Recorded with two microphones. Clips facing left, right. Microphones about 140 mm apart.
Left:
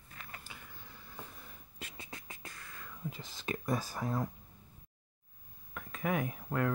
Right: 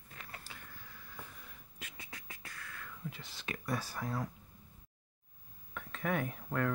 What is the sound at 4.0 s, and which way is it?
Speech, 20° left (ahead or behind).